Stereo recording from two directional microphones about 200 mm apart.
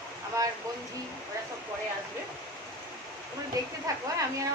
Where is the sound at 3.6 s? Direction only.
20° right (ahead or behind).